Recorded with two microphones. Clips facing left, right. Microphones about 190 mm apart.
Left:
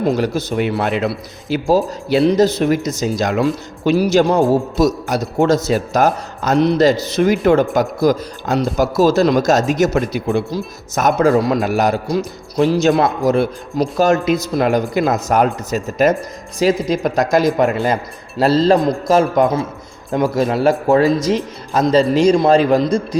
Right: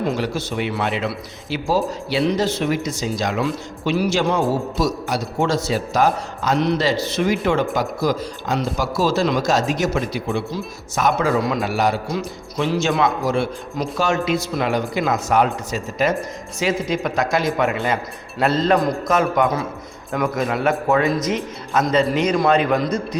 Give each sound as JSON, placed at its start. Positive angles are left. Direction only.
{"t": 0.0, "sound": "a man's voice", "side_deg": 40}